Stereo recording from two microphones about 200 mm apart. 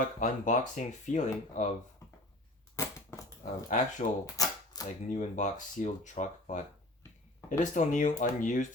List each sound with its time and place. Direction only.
0.0 s speech: 40° left (ahead or behind)
2.7 s crushing: 15° left (ahead or behind)
3.4 s speech: 40° left (ahead or behind)
4.4 s camera: 20° left (ahead or behind)
5.0 s speech: 35° left (ahead or behind)
7.6 s speech: 40° left (ahead or behind)